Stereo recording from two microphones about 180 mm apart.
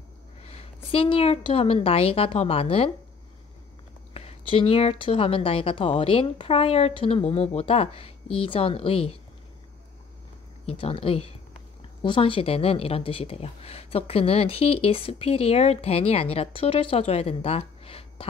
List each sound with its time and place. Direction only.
0.4 s a woman's voice: 35° left (ahead or behind)
4.1 s a woman's voice: 30° left (ahead or behind)
10.7 s a woman's voice: 30° left (ahead or behind)